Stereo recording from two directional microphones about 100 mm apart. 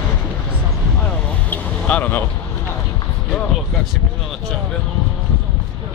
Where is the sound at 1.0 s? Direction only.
15° left (ahead or behind).